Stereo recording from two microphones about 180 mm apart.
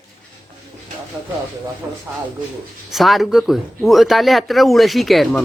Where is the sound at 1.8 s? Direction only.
20° right (ahead or behind).